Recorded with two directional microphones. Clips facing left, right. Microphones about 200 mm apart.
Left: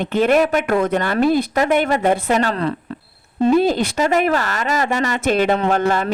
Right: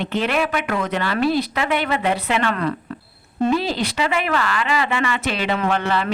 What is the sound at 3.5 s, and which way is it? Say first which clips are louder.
Speech: left 6 dB; 50° left (ahead or behind).